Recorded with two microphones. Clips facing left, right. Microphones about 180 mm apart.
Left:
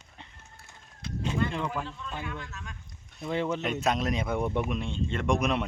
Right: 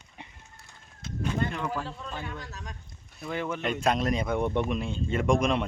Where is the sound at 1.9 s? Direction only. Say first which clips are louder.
Even; 40° right (ahead or behind).